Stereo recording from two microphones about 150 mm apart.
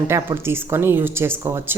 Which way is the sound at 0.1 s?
15° right (ahead or behind).